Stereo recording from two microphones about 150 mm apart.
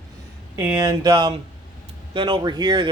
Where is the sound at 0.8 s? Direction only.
25° right (ahead or behind).